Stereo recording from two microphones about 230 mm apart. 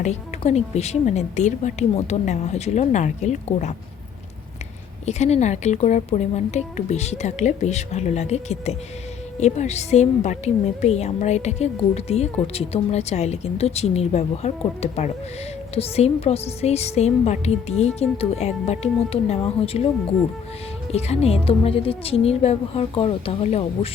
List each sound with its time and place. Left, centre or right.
0.0 s a woman's voice: left
5.0 s a woman's voice: left
20.9 s a woman's voice: left